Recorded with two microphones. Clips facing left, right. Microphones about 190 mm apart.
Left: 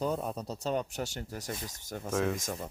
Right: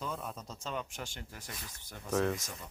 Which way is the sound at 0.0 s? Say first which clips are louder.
Left 8 dB; 40° left (ahead or behind).